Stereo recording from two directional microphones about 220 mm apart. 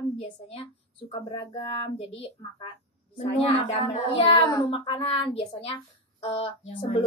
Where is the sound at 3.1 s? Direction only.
25° left (ahead or behind).